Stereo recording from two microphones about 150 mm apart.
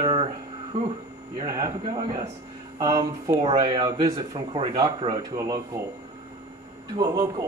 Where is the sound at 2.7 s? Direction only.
25° right (ahead or behind).